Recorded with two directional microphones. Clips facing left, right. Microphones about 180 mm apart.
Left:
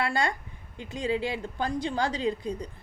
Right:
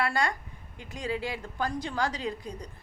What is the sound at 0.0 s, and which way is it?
A woman's voice, 25° left (ahead or behind).